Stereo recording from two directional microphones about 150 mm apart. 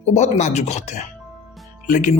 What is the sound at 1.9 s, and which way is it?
Speech, 60° left (ahead or behind).